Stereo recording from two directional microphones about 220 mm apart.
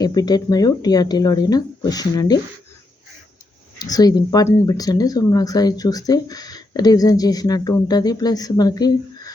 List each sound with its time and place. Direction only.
0.0 s speech: 15° left (ahead or behind)
3.8 s speech: 15° left (ahead or behind)